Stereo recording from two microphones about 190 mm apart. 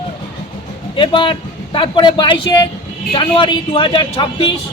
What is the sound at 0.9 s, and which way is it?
A man's voice, 25° left (ahead or behind).